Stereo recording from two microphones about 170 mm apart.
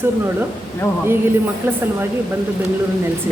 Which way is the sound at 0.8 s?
15° left (ahead or behind).